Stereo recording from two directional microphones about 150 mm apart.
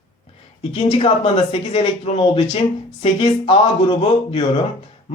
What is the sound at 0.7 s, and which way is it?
Speech, 35° left (ahead or behind).